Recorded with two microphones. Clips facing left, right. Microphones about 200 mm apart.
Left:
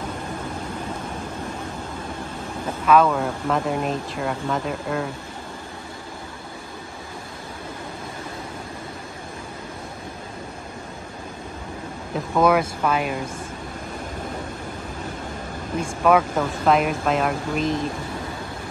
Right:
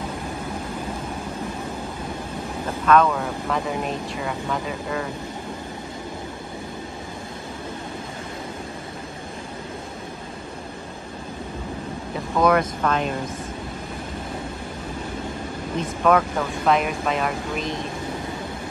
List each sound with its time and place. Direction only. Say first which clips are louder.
2.9 s speech: left 1 dB; 5° left (ahead or behind)
12.4 s speech: even; 5° left (ahead or behind)
15.8 s speech: left 1 dB; 5° left (ahead or behind)